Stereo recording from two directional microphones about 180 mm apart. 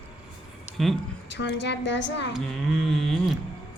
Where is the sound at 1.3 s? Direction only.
75° left (ahead or behind).